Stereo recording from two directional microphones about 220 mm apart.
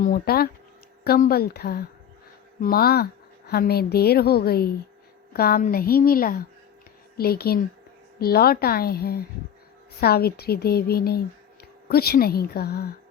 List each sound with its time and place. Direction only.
0.0 s a woman's voice: 40° left (ahead or behind)